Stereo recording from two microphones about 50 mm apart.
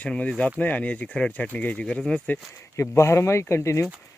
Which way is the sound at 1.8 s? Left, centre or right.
Centre.